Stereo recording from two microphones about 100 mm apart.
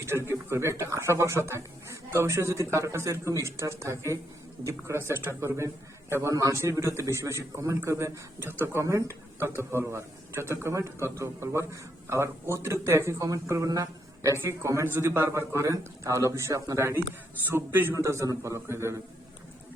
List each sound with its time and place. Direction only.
0.0 s speech: 25° right (ahead or behind)